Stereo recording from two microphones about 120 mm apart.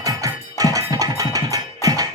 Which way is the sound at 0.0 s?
30° right (ahead or behind).